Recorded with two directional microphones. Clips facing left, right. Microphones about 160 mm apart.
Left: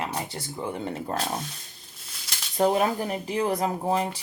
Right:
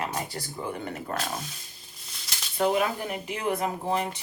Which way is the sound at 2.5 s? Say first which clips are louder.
Left 3 dB; 35° left (ahead or behind).